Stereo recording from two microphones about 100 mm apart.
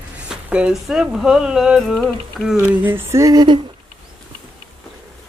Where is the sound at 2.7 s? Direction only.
20° right (ahead or behind).